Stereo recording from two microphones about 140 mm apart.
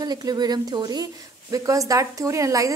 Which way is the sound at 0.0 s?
30° right (ahead or behind).